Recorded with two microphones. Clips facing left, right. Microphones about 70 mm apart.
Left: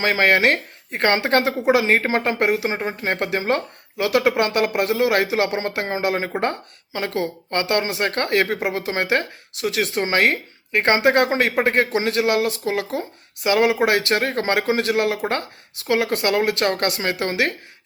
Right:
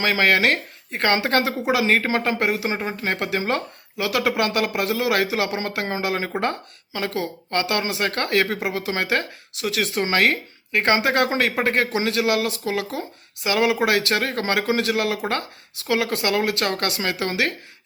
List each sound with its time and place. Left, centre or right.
0.0 s speech: left
3.9 s speech: left